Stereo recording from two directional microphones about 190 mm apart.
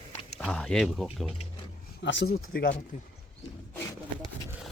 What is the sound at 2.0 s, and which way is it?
Speech, 70° left (ahead or behind).